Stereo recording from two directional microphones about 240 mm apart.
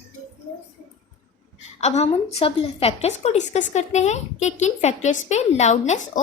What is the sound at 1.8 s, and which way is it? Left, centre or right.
A woman's voice, left.